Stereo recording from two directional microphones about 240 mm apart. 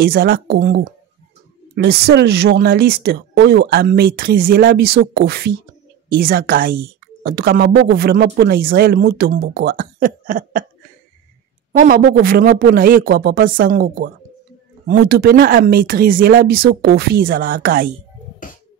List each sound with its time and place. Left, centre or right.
0.0 s speech: right
11.7 s speech: right
18.4 s music: left